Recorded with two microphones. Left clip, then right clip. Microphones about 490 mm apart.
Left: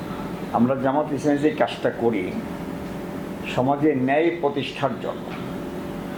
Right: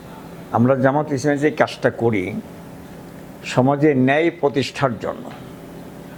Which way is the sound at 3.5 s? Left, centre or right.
Right.